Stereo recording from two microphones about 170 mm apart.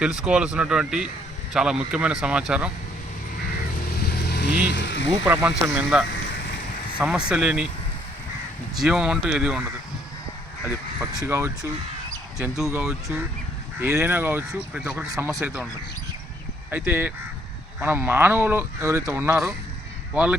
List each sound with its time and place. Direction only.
0.0 s speech: 5° right (ahead or behind)
3.9 s vehicle: 65° left (ahead or behind); by 5.0 s 90° left
5.2 s speech: 15° right (ahead or behind)
8.8 s speech: 5° right (ahead or behind)
11.3 s speech: 15° right (ahead or behind)
12.4 s speech: 5° right (ahead or behind)
13.7 s speech: 15° right (ahead or behind)
16.7 s speech: 10° right (ahead or behind)